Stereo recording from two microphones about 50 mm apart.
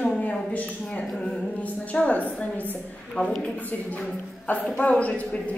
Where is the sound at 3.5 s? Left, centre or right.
Left.